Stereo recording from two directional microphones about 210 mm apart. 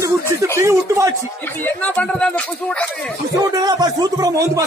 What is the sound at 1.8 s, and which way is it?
Speech, 5° left (ahead or behind).